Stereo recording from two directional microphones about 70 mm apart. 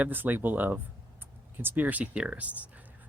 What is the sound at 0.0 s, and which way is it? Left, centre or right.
Speech, right.